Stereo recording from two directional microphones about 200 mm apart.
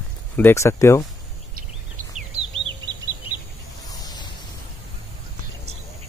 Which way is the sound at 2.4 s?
25° right (ahead or behind).